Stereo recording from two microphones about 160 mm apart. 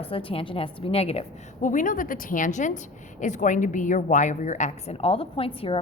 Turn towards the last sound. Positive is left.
turn(degrees=35)  # may be behind; listen again after turning